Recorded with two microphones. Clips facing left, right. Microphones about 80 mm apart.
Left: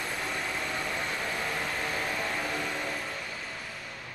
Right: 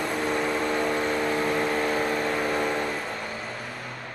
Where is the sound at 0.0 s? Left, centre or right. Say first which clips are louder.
Right 8 dB; right.